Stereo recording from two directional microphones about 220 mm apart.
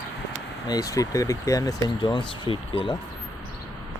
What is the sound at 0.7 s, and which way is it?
Speech, 15° left (ahead or behind).